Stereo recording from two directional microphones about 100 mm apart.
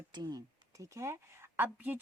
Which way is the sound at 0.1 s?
40° right (ahead or behind).